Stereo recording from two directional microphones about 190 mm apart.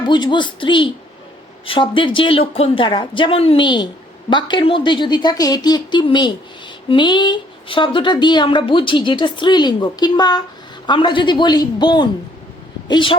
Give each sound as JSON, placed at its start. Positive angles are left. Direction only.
{"t": 0.0, "sound": "a woman's voice", "side_deg": 25}